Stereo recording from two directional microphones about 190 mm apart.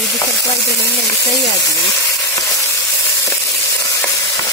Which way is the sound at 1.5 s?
20° left (ahead or behind).